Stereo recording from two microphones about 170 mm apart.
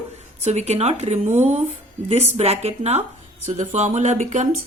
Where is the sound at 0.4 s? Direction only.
40° right (ahead or behind).